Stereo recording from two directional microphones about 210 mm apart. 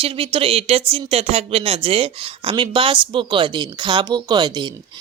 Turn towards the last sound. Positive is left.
turn(degrees=-20)  # may be behind; listen again after turning